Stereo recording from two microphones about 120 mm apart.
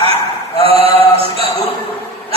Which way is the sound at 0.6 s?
55° right (ahead or behind).